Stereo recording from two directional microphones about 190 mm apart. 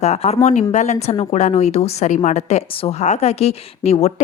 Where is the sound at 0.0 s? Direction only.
35° left (ahead or behind).